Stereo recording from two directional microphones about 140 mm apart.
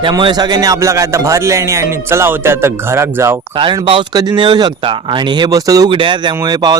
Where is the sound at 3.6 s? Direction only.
35° right (ahead or behind).